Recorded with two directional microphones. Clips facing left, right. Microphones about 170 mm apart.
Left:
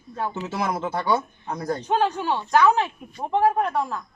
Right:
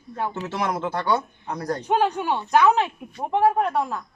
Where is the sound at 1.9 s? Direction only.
15° right (ahead or behind).